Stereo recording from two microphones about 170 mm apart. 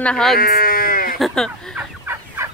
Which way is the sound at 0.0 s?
5° left (ahead or behind).